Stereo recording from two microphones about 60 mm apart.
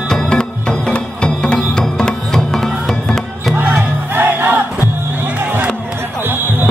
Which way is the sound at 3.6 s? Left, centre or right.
Right.